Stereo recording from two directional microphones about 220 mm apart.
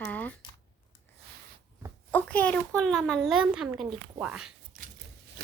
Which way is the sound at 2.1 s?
5° left (ahead or behind).